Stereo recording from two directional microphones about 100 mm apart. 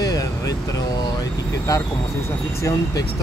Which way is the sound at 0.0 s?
35° left (ahead or behind).